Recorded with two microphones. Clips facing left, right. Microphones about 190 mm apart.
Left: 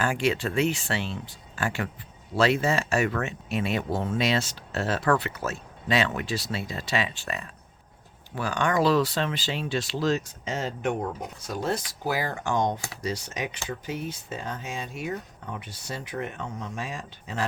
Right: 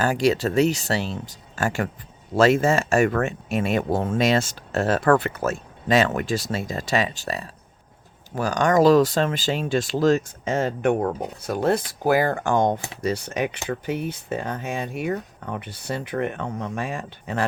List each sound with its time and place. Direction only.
0.0 s speech: 40° right (ahead or behind); by 17.4 s 55° right (ahead or behind)